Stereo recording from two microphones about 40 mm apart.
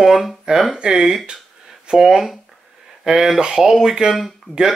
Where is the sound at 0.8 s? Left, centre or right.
Centre.